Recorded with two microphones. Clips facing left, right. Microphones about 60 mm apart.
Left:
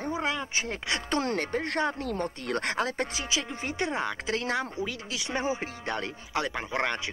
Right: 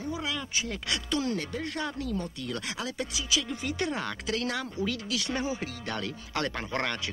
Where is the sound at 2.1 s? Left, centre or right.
Left.